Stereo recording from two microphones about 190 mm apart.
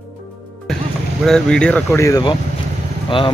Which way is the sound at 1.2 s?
5° left (ahead or behind).